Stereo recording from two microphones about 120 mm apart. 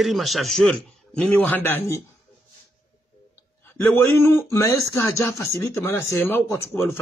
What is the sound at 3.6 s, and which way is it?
A man's voice, 20° left (ahead or behind).